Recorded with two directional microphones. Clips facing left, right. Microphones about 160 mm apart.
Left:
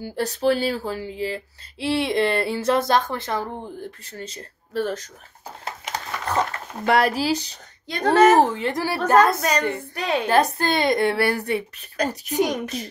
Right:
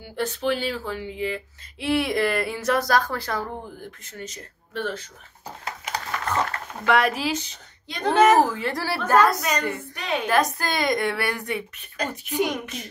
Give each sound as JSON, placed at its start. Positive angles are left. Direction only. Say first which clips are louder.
{"t": 0.0, "sound": "speech", "louder": "left 4 dB", "side_deg": 40}
{"t": 6.8, "sound": "speech", "louder": "left 2 dB", "side_deg": 35}